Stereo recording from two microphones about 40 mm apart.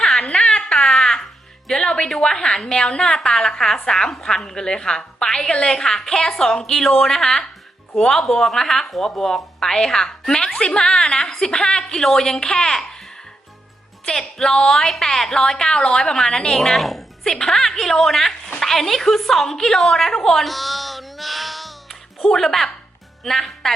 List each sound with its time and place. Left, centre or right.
0.2 s a sound: centre
1.6 s music: centre
2.2 s a woman's voice: centre
3.0 s a woman's voice: centre
14.2 s speech: centre
16.7 s a woman's voice: centre
17.2 s speech: centre
19.5 s a sound: centre
23.2 s speech: centre